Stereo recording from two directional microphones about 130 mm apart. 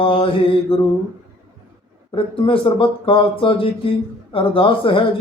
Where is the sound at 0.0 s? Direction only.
40° left (ahead or behind).